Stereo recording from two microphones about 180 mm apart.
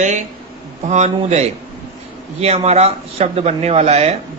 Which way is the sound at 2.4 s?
35° right (ahead or behind).